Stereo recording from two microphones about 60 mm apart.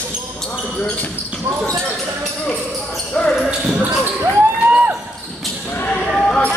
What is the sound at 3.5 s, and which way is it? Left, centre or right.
Basketball bounce, centre.